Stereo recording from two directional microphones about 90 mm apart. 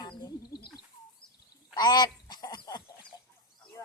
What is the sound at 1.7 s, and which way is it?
Chicken, 50° left (ahead or behind).